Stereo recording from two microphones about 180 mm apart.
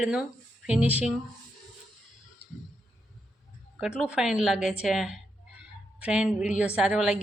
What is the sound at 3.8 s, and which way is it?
A woman's voice, 5° right (ahead or behind).